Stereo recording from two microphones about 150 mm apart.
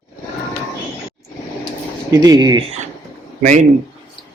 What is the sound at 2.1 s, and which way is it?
Speech, 25° right (ahead or behind).